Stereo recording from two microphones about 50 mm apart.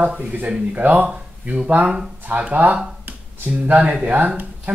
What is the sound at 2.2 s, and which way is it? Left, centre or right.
Speech, right.